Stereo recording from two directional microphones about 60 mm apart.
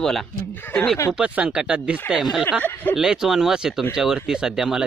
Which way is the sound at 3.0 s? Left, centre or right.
Centre.